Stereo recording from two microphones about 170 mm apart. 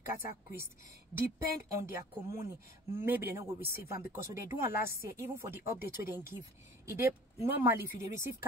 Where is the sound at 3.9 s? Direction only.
15° right (ahead or behind).